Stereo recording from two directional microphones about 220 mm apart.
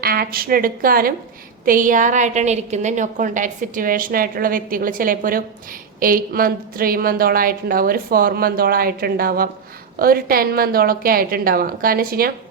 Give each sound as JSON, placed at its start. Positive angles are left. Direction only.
{"t": 0.0, "sound": "a woman's voice", "side_deg": -45}